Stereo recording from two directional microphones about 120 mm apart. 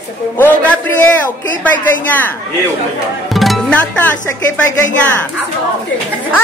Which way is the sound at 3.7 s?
10° left (ahead or behind).